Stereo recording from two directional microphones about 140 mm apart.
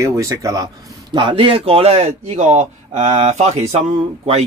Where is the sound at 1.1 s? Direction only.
35° right (ahead or behind).